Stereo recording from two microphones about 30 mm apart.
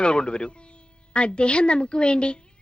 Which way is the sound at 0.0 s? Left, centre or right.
Left.